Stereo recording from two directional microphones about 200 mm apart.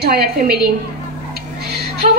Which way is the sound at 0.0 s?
50° right (ahead or behind).